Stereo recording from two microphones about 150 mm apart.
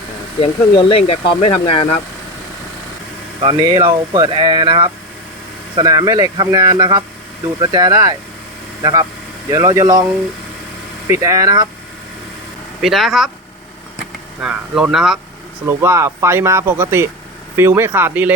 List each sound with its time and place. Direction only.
0.3 s speech: 40° left (ahead or behind)
3.4 s speech: 30° right (ahead or behind)
11.1 s speech: 20° right (ahead or behind)
12.8 s speech: centre (ahead or behind)
14.4 s speech: 5° right (ahead or behind)
15.8 s speech: 15° right (ahead or behind)